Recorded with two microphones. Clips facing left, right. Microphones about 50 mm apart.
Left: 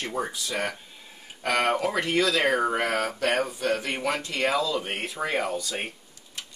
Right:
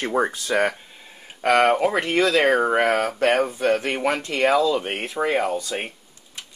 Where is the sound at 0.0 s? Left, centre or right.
Right.